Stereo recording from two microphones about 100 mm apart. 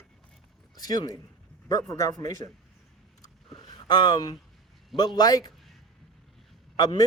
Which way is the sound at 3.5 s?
45° left (ahead or behind).